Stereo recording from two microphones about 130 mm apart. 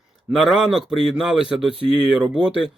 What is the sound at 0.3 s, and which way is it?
Speech, centre (ahead or behind).